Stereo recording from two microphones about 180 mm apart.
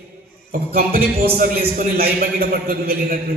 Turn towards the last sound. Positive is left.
turn(degrees=-55)  # may be behind; listen again after turning